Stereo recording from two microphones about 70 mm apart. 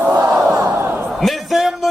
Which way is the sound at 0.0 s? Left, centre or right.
Right.